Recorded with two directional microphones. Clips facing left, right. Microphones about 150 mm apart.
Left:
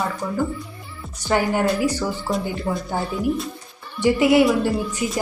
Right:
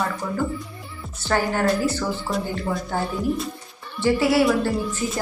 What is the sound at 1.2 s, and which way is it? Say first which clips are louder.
Speech: left 2 dB; 15° left (ahead or behind).